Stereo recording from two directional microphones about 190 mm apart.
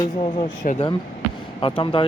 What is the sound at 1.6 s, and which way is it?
Speech, 25° left (ahead or behind).